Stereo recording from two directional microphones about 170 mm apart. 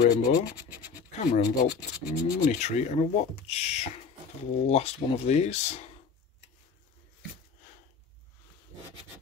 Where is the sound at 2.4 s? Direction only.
40° left (ahead or behind).